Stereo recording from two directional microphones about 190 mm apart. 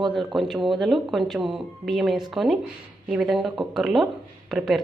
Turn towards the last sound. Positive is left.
turn(degrees=0)  # may be behind; listen again after turning